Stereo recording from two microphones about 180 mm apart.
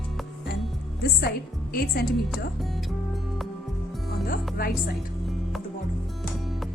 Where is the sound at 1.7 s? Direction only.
55° left (ahead or behind).